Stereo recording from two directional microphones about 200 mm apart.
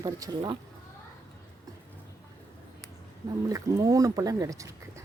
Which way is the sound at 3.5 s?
15° right (ahead or behind).